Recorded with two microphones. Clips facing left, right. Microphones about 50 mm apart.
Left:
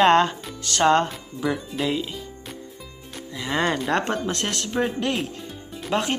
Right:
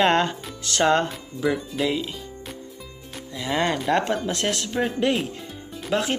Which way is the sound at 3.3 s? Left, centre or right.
Centre.